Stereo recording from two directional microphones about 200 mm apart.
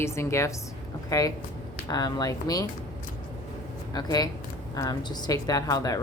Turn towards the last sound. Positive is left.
turn(degrees=15)  # may be behind; listen again after turning